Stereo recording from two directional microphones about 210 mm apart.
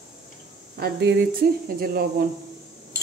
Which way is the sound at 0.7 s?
50° right (ahead or behind).